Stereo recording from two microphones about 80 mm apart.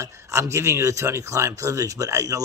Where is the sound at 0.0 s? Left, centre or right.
Right.